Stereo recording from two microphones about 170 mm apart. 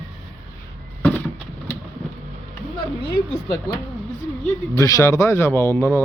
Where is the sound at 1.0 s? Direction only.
10° left (ahead or behind).